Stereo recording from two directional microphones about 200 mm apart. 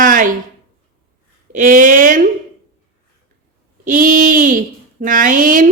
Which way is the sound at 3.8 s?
40° right (ahead or behind).